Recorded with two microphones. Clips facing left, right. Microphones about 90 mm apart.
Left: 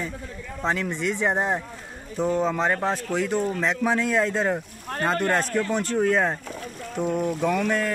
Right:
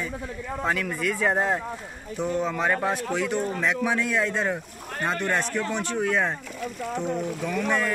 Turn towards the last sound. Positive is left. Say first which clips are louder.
# left 3 dB
turn(degrees=60)  # may be behind; listen again after turning